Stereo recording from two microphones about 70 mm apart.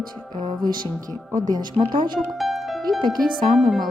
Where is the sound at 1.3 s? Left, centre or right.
Right.